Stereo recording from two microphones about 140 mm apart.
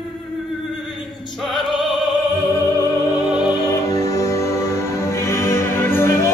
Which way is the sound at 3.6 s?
25° left (ahead or behind).